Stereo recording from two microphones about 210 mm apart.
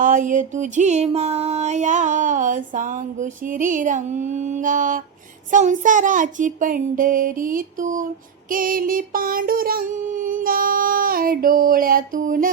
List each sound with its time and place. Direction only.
0.0 s music: 40° right (ahead or behind)
8.4 s child singing: 40° right (ahead or behind)